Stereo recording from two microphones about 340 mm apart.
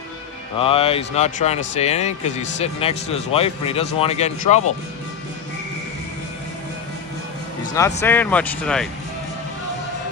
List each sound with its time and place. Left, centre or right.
0.6 s speech: centre
7.7 s speech: centre